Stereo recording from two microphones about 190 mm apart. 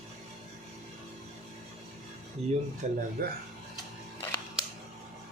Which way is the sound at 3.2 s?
50° right (ahead or behind).